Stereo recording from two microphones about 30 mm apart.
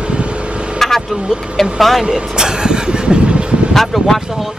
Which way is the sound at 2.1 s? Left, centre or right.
Right.